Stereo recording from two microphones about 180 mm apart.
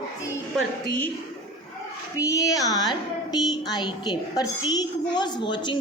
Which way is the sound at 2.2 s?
20° left (ahead or behind).